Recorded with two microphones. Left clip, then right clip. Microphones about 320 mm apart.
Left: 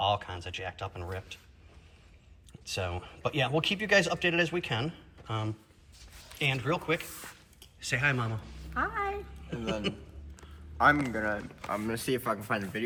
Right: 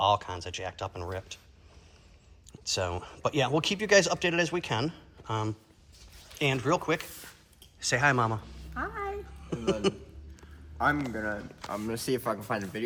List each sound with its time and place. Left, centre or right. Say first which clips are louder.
0.0 s speech: right 4 dB; centre
2.5 s speech: right 4 dB; centre
6.6 s a woman's voice: right 3 dB; centre
10.8 s speech: left 3 dB; centre
12.0 s speech: right 2 dB; right